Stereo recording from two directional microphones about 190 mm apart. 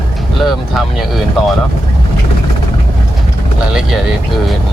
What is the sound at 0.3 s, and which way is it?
Speech, centre (ahead or behind).